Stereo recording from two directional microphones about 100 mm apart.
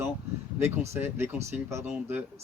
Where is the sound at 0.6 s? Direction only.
25° right (ahead or behind).